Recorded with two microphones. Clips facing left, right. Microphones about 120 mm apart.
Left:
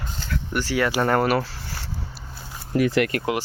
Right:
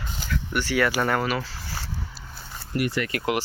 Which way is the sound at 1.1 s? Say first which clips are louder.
Left 5 dB; 50° left (ahead or behind).